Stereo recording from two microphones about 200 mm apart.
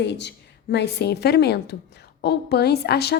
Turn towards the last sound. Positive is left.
turn(degrees=55)  # may be behind; listen again after turning